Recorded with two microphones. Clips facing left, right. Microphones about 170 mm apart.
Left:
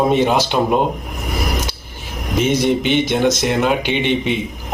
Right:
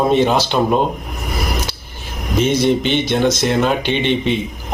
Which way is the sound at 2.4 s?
15° left (ahead or behind).